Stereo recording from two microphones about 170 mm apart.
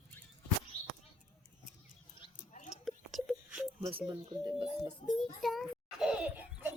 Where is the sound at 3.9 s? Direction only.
30° right (ahead or behind).